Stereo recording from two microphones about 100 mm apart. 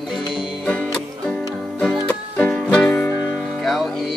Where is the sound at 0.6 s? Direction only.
15° left (ahead or behind).